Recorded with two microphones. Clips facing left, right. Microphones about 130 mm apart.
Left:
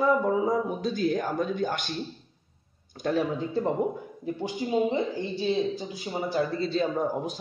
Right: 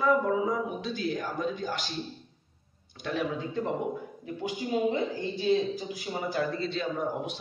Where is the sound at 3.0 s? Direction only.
35° left (ahead or behind).